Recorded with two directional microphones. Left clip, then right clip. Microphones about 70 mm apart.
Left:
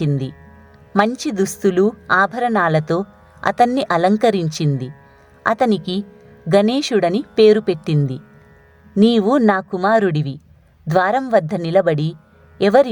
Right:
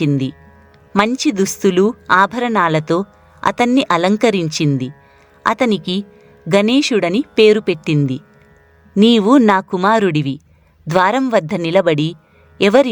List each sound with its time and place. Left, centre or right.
0.0 s speech: right
9.0 s speech: right